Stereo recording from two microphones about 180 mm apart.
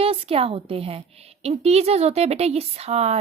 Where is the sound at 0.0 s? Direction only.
35° right (ahead or behind).